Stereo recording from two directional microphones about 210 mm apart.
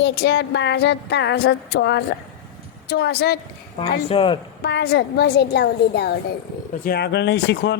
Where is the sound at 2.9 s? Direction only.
50° left (ahead or behind).